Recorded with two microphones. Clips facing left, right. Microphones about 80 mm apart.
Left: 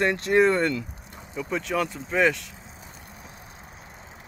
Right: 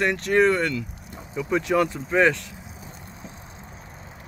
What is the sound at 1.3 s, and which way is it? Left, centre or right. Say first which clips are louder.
Speech: right 5 dB; centre.